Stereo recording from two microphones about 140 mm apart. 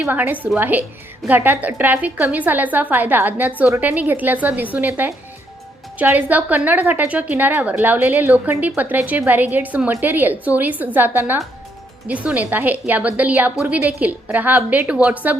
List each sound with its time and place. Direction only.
0.0 s a woman's voice: 15° right (ahead or behind)